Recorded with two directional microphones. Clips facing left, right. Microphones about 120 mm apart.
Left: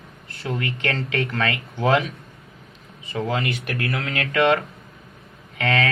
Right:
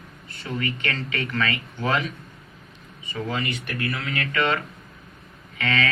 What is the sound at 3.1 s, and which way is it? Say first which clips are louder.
Speech: left 4 dB; 60° left (ahead or behind).